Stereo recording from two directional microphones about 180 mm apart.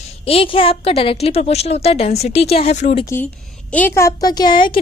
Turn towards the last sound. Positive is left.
turn(degrees=25)  # may be behind; listen again after turning